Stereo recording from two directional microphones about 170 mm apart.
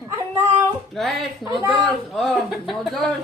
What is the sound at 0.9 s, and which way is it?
Speech, centre (ahead or behind).